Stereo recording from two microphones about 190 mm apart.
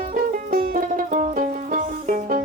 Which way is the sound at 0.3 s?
45° right (ahead or behind).